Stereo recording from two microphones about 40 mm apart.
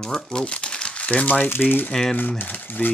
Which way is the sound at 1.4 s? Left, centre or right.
Left.